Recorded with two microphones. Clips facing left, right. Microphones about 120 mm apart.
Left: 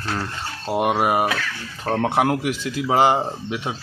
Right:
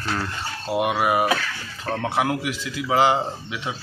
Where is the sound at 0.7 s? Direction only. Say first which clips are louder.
Left 2 dB; 40° left (ahead or behind).